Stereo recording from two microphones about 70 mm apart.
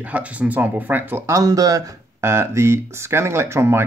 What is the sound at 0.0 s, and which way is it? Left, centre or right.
Speech, centre.